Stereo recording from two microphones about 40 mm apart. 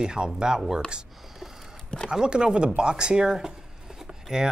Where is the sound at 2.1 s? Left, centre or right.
Right.